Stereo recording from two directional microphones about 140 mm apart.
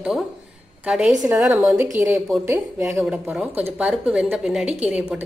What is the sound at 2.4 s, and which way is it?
Speech, 20° right (ahead or behind).